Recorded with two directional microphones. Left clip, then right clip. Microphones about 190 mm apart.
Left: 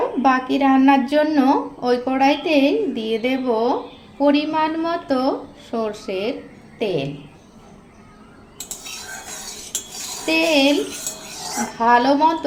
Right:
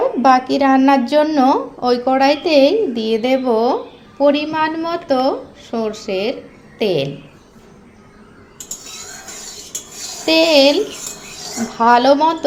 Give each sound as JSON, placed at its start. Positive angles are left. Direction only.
{"t": 0.2, "sound": "a woman's voice", "side_deg": -20}
{"t": 6.7, "sound": "a woman's voice", "side_deg": -30}
{"t": 10.2, "sound": "a woman's voice", "side_deg": -30}
{"t": 11.8, "sound": "a woman's voice", "side_deg": -25}